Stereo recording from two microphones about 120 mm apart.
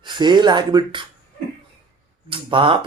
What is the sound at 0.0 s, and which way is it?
Speech, 40° right (ahead or behind).